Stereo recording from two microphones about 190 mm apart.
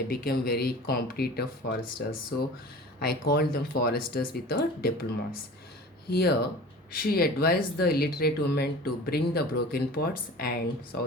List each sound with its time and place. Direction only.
0.1 s speech: 55° left (ahead or behind)
6.9 s speech: 50° left (ahead or behind)